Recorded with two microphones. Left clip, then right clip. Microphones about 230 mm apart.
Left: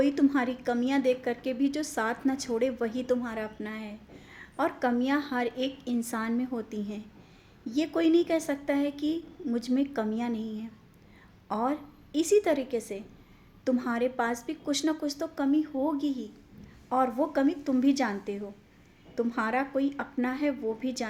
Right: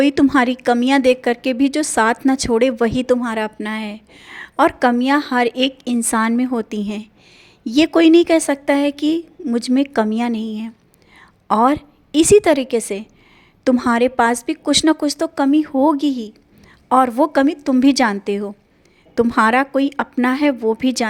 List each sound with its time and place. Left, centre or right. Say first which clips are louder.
0.0 s a woman's voice: right 11 dB; right